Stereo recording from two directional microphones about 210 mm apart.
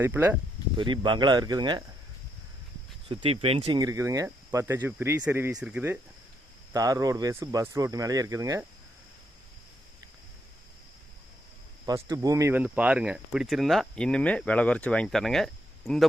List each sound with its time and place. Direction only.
0.0 s speech: 10° right (ahead or behind)
0.8 s speech: 20° right (ahead or behind)
3.1 s speech: 25° right (ahead or behind)
11.9 s speech: 15° right (ahead or behind); by 16.0 s centre (ahead or behind)